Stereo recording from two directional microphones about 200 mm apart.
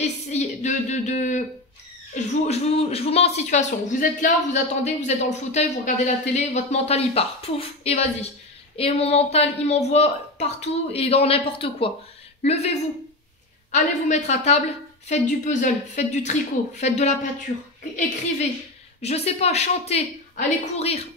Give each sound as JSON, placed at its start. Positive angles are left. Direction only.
{"t": 0.0, "sound": "speech", "side_deg": 35}
{"t": 18.9, "sound": "speech", "side_deg": 30}